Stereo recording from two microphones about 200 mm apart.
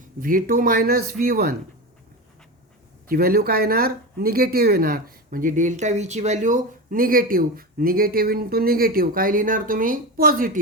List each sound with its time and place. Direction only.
0.2 s speech: 45° right (ahead or behind)
3.1 s speech: 50° right (ahead or behind)